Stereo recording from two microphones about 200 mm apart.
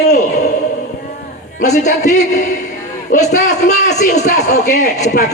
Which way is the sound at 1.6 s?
35° left (ahead or behind).